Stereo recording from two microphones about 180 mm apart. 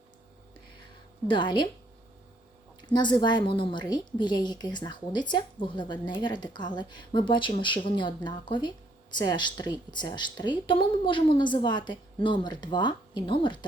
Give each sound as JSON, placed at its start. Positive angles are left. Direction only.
{"t": 1.3, "sound": "a woman's voice", "side_deg": 25}
{"t": 2.8, "sound": "a woman's voice", "side_deg": 25}